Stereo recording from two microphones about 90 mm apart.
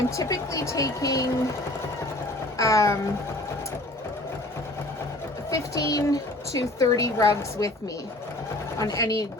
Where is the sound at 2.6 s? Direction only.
35° left (ahead or behind).